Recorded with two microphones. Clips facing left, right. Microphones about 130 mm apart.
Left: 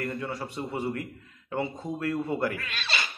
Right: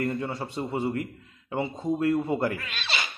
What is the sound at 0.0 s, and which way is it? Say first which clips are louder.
A man's voice: right 3 dB; 25° right (ahead or behind).